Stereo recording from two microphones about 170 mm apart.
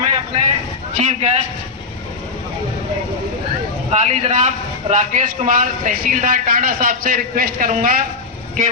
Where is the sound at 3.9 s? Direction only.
40° right (ahead or behind).